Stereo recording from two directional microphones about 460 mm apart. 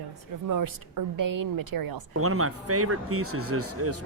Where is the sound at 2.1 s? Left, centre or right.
Right.